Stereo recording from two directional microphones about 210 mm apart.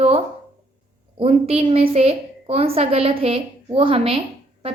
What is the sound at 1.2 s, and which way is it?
A woman's voice, 30° right (ahead or behind).